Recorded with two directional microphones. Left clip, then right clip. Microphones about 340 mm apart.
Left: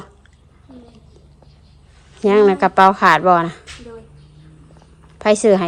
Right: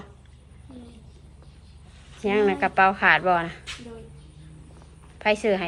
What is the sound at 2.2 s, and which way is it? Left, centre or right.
A woman's voice, centre.